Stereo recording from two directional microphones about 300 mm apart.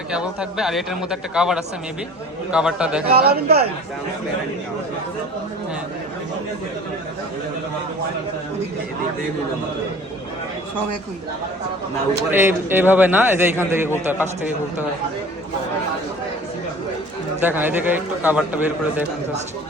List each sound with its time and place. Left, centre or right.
0.1 s a man's voice: centre
3.1 s speech: right
12.3 s a man's voice: centre
17.4 s a man's voice: centre